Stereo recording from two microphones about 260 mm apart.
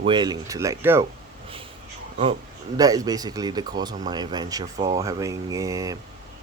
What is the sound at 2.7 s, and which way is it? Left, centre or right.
Speech, centre.